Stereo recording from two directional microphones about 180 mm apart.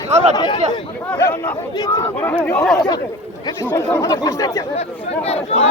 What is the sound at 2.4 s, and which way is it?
Speech, 10° left (ahead or behind).